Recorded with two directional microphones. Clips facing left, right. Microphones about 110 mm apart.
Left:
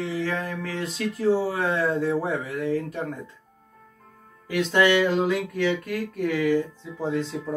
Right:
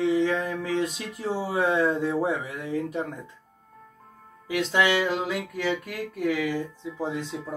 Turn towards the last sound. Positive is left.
turn(degrees=-15)  # may be behind; listen again after turning